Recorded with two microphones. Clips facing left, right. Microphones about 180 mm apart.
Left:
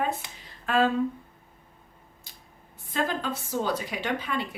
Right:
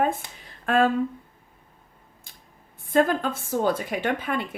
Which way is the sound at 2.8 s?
50° right (ahead or behind).